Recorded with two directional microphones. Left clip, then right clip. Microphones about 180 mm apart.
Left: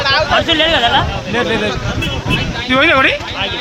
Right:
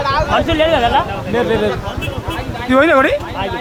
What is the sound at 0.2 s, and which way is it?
Speech, 50° right (ahead or behind).